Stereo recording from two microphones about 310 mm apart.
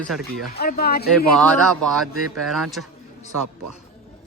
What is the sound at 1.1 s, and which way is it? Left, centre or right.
Speech, centre.